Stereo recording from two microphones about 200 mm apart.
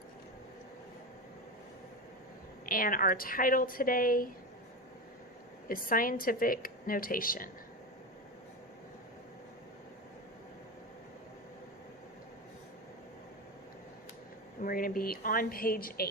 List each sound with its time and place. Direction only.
2.6 s a woman's voice: 45° left (ahead or behind)
5.6 s a woman's voice: 45° left (ahead or behind)
14.6 s a woman's voice: 45° left (ahead or behind)